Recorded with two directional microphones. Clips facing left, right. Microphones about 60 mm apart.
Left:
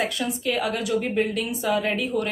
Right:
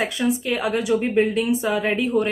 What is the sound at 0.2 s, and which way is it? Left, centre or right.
A woman's voice, right.